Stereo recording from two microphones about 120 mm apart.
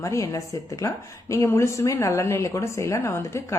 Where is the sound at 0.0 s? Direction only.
25° left (ahead or behind).